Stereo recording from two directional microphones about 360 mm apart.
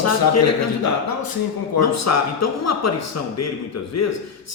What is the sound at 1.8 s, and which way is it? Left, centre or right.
Speech, left.